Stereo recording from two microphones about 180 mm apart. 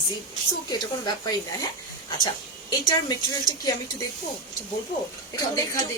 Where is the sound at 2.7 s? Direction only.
20° left (ahead or behind).